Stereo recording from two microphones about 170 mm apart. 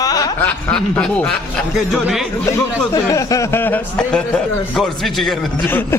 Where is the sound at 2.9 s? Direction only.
20° left (ahead or behind); by 5.3 s centre (ahead or behind).